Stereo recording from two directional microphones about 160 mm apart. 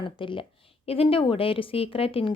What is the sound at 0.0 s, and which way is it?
Speech, 30° left (ahead or behind).